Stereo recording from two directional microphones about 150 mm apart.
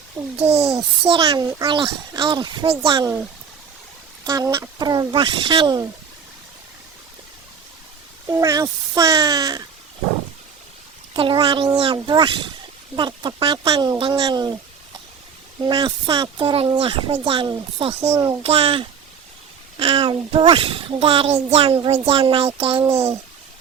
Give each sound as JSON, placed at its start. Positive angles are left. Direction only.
{"t": 0.3, "sound": "a child's voice", "side_deg": -40}
{"t": 1.2, "sound": "a child's voice", "side_deg": -25}
{"t": 4.2, "sound": "speech", "side_deg": -25}
{"t": 8.3, "sound": "speech", "side_deg": -20}
{"t": 11.1, "sound": "a child's voice", "side_deg": -35}
{"t": 15.6, "sound": "a child's voice", "side_deg": -30}
{"t": 18.1, "sound": "speech", "side_deg": -20}
{"t": 18.4, "sound": "a child's voice", "side_deg": -40}
{"t": 22.8, "sound": "speech", "side_deg": -20}